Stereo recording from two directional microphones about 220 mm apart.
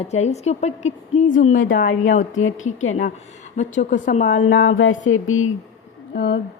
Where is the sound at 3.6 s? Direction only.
35° left (ahead or behind).